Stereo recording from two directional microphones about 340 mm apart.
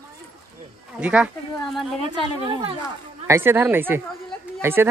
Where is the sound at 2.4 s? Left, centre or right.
Centre.